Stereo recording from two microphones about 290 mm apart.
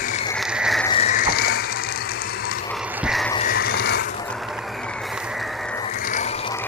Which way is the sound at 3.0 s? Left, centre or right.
Centre.